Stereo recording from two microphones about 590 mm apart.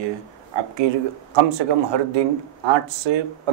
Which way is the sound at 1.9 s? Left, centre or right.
Right.